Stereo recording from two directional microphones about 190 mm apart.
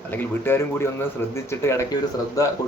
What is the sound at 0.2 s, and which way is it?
Speech, 10° left (ahead or behind).